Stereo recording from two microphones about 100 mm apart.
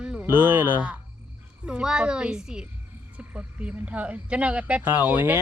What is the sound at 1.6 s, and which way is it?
Speech, 10° right (ahead or behind).